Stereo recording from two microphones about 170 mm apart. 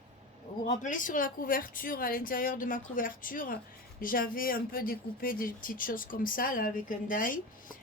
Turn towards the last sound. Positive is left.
turn(degrees=55)  # may be behind; listen again after turning